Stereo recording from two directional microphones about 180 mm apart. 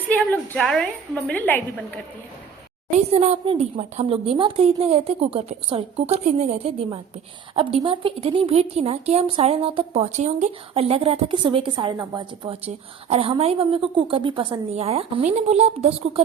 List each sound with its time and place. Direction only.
0.1 s a woman's voice: 10° left (ahead or behind)
3.1 s speech: 35° right (ahead or behind)